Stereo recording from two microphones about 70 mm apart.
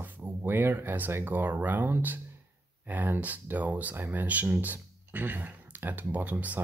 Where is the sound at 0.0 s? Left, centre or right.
Right.